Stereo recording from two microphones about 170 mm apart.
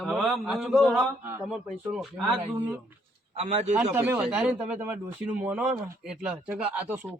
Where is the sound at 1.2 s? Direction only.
15° right (ahead or behind).